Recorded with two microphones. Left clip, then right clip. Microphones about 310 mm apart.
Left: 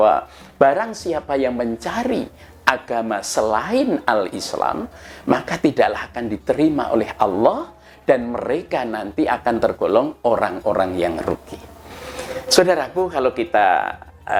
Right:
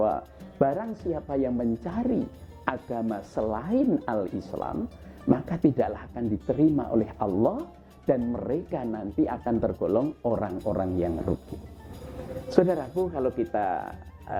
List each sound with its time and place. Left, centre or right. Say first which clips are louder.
0.0 s speech: left 11 dB; centre
4.5 s speech: left 14 dB; centre
7.3 s speech: left 9 dB; centre